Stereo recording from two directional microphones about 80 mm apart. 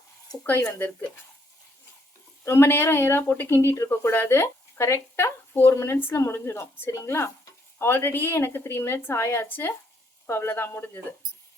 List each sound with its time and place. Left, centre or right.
0.7 s a woman's voice: left
2.4 s a woman's voice: left